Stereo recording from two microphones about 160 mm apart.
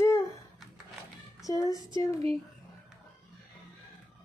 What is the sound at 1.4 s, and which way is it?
Speech, 20° left (ahead or behind).